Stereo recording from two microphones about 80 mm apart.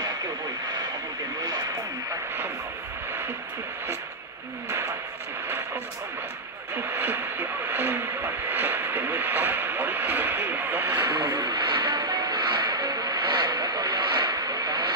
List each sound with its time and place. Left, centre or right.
4.6 s a sound: right
6.7 s radio: right
11.2 s music: right